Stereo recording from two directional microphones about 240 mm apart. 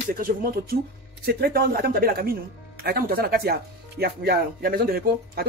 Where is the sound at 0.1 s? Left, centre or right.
Right.